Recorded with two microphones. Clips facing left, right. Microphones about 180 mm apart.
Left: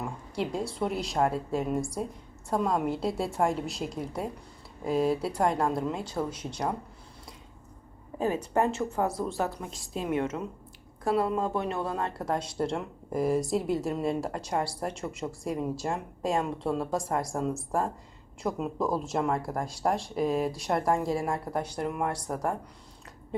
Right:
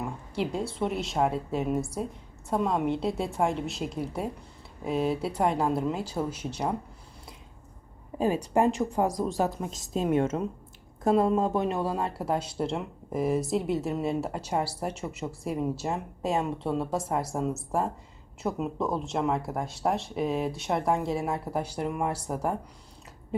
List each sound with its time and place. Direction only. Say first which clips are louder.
0.0 s a sound: right 1 dB; centre (ahead or behind)
0.7 s speech: right 1 dB; centre (ahead or behind)
8.5 s a woman's voice: right 3 dB; 15° right (ahead or behind)